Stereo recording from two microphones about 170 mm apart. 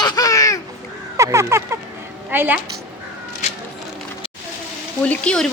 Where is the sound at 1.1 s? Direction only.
15° right (ahead or behind).